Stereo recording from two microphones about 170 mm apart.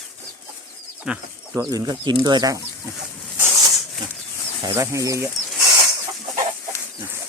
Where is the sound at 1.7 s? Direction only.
25° right (ahead or behind).